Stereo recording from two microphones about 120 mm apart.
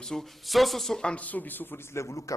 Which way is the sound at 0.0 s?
5° left (ahead or behind).